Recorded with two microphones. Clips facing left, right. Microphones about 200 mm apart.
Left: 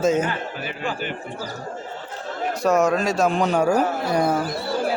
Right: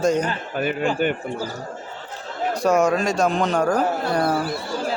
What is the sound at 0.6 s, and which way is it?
Speech, 55° right (ahead or behind).